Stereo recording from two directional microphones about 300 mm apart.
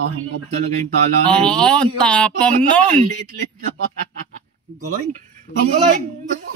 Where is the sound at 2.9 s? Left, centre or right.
Right.